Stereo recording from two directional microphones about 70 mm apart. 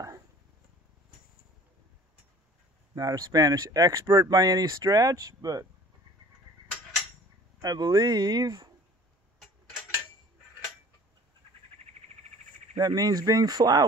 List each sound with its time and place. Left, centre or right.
2.9 s speech: right
7.6 s speech: right
12.7 s speech: right